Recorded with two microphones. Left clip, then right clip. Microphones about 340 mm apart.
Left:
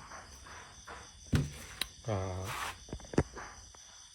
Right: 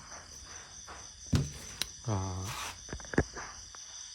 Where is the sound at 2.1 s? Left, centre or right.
Centre.